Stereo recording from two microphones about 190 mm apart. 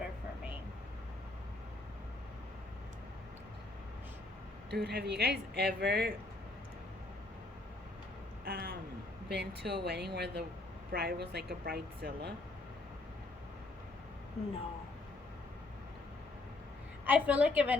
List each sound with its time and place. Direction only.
4.7 s speech: 60° right (ahead or behind)
8.4 s a sound: 55° right (ahead or behind)
9.3 s speech: 60° right (ahead or behind)
17.1 s a woman's voice: 10° right (ahead or behind)